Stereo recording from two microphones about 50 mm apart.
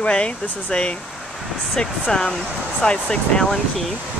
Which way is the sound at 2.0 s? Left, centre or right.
Centre.